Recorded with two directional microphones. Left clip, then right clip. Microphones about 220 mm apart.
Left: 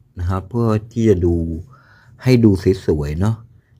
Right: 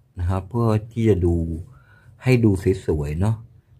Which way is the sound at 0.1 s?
10° left (ahead or behind).